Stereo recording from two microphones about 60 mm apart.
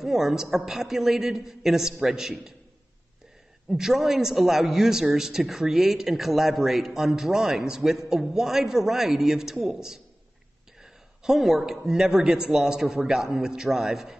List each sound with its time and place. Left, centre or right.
0.0 s speech: centre
3.7 s speech: centre